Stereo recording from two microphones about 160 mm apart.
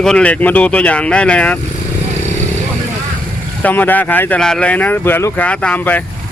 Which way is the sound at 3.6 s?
10° left (ahead or behind).